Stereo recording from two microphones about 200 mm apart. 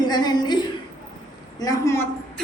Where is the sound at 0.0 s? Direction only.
20° left (ahead or behind).